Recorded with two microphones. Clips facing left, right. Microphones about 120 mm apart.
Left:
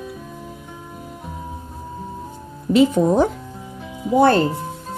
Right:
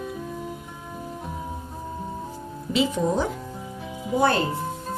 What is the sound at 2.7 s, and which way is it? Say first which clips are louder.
Speech: left 8 dB; 50° left (ahead or behind).